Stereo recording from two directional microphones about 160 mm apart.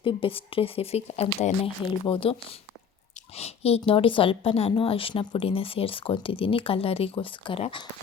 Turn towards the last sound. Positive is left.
turn(degrees=30)  # may be behind; listen again after turning